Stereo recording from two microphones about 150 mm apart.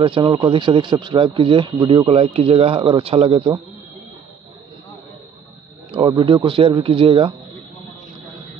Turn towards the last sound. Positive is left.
turn(degrees=-35)  # may be behind; listen again after turning